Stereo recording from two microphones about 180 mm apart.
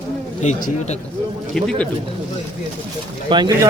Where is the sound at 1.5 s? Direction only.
5° left (ahead or behind).